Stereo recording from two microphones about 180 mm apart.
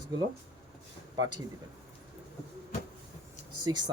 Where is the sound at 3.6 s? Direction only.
25° right (ahead or behind).